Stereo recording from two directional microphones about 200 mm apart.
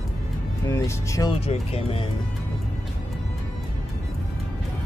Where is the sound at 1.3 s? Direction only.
30° left (ahead or behind).